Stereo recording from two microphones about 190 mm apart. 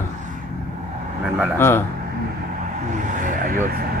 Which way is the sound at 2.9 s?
40° right (ahead or behind).